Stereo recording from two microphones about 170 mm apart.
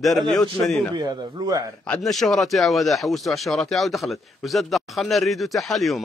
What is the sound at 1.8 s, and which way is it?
Speech, centre (ahead or behind).